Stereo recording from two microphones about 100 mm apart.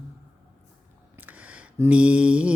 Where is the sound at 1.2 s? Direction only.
15° right (ahead or behind).